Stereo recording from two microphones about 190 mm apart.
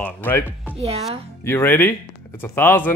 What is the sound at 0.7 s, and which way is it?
Speech, 35° right (ahead or behind).